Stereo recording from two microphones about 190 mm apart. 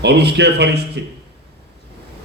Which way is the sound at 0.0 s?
60° right (ahead or behind).